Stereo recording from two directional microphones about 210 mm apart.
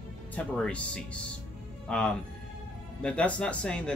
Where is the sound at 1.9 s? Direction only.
5° left (ahead or behind).